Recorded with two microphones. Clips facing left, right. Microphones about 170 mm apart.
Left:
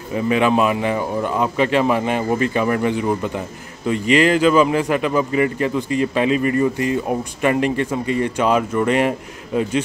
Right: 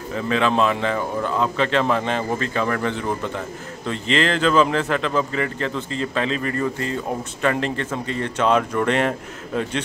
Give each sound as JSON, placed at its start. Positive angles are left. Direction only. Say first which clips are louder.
{"t": 0.1, "sound": "a man's voice", "louder": "left 4 dB", "side_deg": 15}